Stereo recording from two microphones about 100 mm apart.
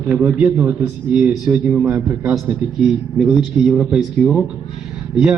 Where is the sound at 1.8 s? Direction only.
25° right (ahead or behind).